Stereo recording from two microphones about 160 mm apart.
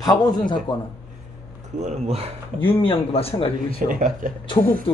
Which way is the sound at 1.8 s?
40° right (ahead or behind).